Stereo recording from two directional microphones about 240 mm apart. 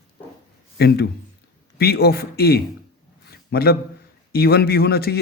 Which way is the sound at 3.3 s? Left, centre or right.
Left.